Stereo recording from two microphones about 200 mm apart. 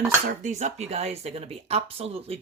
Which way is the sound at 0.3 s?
35° right (ahead or behind).